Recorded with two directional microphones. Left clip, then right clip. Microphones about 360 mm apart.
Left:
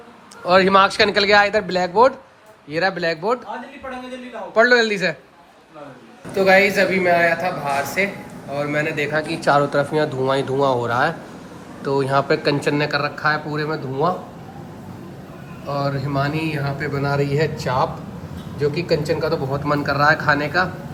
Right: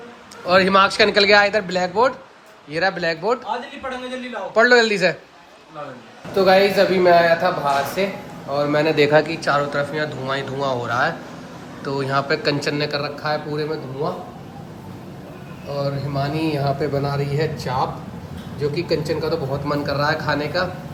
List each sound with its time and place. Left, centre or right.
0.4 s speech: centre
4.5 s speech: centre
6.3 s a man's voice: centre
9.3 s speech: centre
15.6 s speech: centre